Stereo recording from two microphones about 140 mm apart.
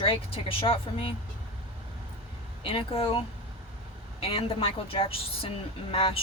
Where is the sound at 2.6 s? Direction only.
40° left (ahead or behind).